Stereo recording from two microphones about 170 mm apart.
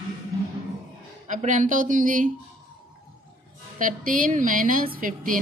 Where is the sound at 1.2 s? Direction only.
45° right (ahead or behind).